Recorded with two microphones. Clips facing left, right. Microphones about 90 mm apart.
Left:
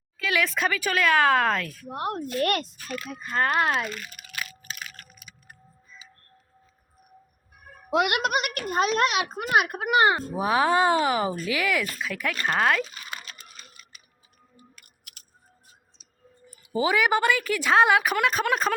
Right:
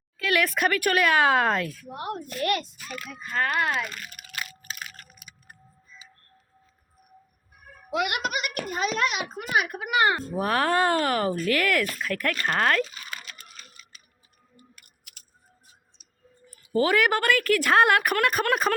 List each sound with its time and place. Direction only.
0.2 s a woman's voice: 5° right (ahead or behind)
1.9 s a woman's voice: 50° left (ahead or behind)
3.1 s speech: 35° left (ahead or behind)
3.8 s a child's voice: 5° right (ahead or behind)
4.9 s a sound: 10° right (ahead or behind)
7.9 s a child's voice: 60° left (ahead or behind)
10.2 s speech: 10° left (ahead or behind)
16.7 s a woman's voice: 5° left (ahead or behind)